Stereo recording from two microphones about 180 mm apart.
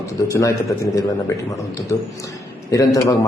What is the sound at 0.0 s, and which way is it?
A man's voice, 15° left (ahead or behind).